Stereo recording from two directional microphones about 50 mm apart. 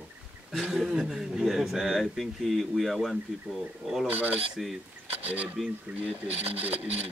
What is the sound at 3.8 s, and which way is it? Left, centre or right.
Music, centre.